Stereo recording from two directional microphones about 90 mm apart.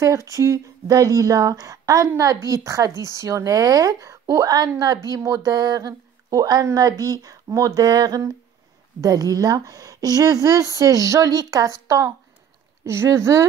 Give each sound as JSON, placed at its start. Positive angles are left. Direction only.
{"t": 0.0, "sound": "a woman's voice", "side_deg": -35}